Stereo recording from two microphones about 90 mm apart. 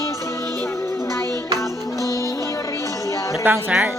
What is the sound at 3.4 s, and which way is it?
Speech, 20° right (ahead or behind).